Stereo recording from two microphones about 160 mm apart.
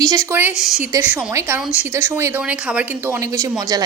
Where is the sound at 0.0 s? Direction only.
20° right (ahead or behind).